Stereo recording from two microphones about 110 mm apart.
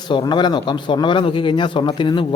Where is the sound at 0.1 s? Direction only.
45° left (ahead or behind).